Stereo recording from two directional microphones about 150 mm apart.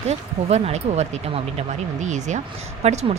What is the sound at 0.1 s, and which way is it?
Speech, 45° right (ahead or behind).